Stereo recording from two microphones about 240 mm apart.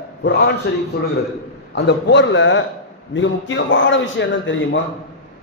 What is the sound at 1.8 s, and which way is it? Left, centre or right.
Speech, left.